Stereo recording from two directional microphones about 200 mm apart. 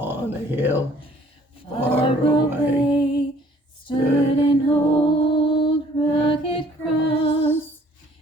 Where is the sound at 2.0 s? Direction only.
25° left (ahead or behind).